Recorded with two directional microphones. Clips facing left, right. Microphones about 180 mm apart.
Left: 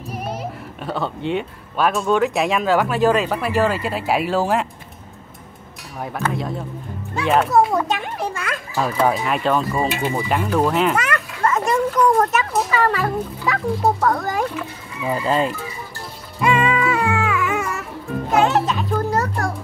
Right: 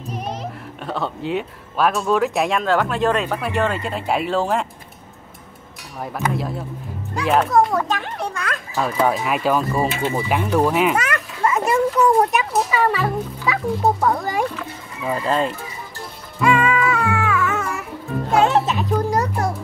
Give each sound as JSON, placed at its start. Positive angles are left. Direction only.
{"t": 0.1, "sound": "speech", "side_deg": 10}
{"t": 5.9, "sound": "speech", "side_deg": 0}
{"t": 9.8, "sound": "speech", "side_deg": 15}
{"t": 10.1, "sound": "speech", "side_deg": -5}
{"t": 15.0, "sound": "speech", "side_deg": 0}
{"t": 16.3, "sound": "music", "side_deg": 20}
{"t": 18.5, "sound": "a child's voice", "side_deg": -20}